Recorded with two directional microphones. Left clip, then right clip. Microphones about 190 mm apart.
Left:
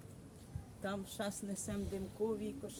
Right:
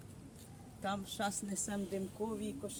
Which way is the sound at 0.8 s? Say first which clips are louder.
Right 3 dB; 15° left (ahead or behind).